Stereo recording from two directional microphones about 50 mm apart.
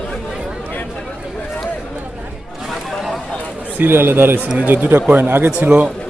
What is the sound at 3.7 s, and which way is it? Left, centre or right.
A man's voice, right.